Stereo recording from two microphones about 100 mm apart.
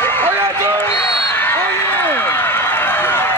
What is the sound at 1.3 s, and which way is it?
Run, 20° left (ahead or behind).